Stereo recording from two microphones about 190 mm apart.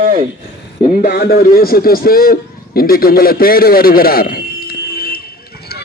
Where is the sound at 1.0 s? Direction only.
55° left (ahead or behind).